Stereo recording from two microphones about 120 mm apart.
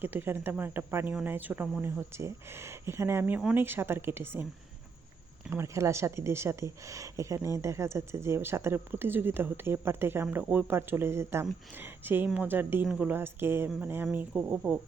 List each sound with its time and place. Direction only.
0.0 s speech: 15° right (ahead or behind)
1.8 s speech: 20° right (ahead or behind)
5.5 s speech: 25° right (ahead or behind); by 14.8 s 10° right (ahead or behind)